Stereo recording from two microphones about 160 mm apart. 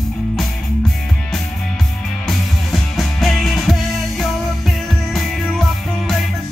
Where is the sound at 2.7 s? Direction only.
Centre (ahead or behind).